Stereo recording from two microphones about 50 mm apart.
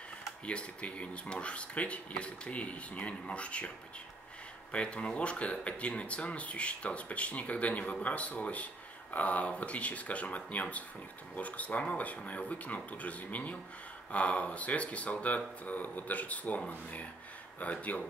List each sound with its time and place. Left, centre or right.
0.5 s speech: left
4.7 s speech: left